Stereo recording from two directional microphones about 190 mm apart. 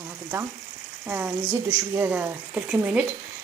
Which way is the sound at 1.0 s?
10° right (ahead or behind).